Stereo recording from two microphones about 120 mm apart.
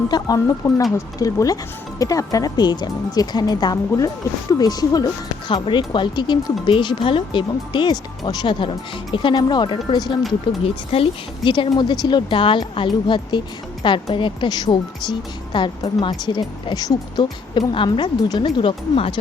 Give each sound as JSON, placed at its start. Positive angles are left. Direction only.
{"t": 0.1, "sound": "speech", "side_deg": 35}
{"t": 10.6, "sound": "speech", "side_deg": 50}